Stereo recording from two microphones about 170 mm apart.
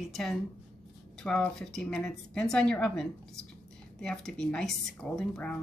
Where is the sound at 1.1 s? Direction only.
5° left (ahead or behind).